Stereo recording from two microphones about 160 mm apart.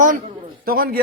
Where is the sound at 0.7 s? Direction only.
70° right (ahead or behind).